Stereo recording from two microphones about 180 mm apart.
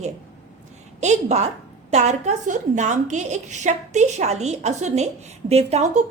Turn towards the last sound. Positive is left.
turn(degrees=-35)  # may be behind; listen again after turning